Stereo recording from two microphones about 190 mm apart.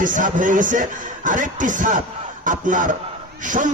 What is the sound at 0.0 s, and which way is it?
A man's voice, 45° right (ahead or behind).